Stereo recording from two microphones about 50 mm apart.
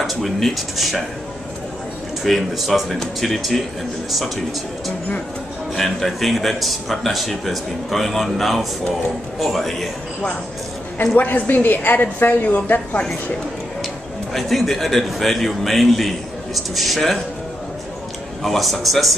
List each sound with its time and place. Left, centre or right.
0.0 s a man's voice: centre
2.2 s a man's voice: centre
5.8 s a man's voice: centre
11.1 s a woman's voice: left
14.3 s a man's voice: centre
18.4 s a man's voice: centre